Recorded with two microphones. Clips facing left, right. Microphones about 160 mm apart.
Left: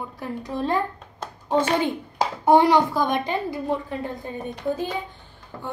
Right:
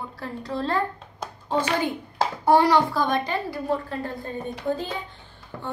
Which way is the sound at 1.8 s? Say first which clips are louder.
Left 1 dB; 20° left (ahead or behind).